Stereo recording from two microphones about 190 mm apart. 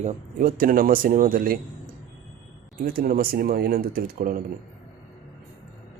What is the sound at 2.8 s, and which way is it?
Speech, 50° right (ahead or behind).